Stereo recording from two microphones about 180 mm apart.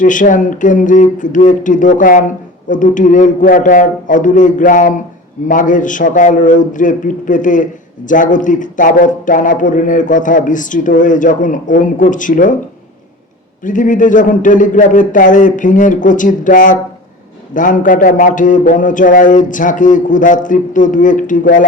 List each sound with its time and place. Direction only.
0.0 s a man's voice: 45° left (ahead or behind)
13.7 s a man's voice: 45° left (ahead or behind)